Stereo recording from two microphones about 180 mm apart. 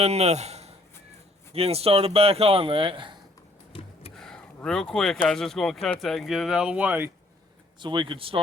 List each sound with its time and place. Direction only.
0.0 s speech: 35° right (ahead or behind)
4.1 s speech: 5° left (ahead or behind)
7.8 s speech: 25° right (ahead or behind)